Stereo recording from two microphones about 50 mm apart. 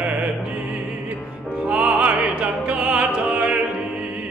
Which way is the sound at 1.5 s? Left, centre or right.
Right.